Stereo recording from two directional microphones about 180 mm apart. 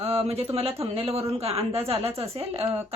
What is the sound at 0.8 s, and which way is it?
Speech, 35° right (ahead or behind).